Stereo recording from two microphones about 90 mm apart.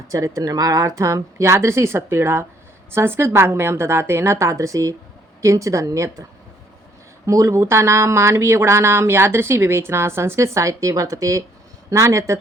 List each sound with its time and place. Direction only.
0.1 s a woman's voice: 40° right (ahead or behind)
7.3 s speech: 35° right (ahead or behind)